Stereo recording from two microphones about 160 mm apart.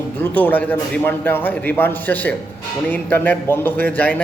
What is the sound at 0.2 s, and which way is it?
A man's voice, 10° left (ahead or behind).